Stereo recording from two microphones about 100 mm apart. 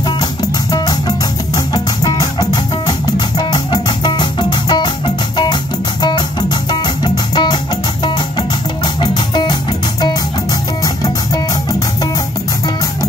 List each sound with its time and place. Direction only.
0.2 s music: 40° left (ahead or behind)